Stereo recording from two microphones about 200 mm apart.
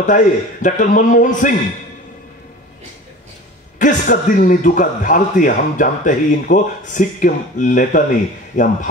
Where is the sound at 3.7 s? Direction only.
40° left (ahead or behind).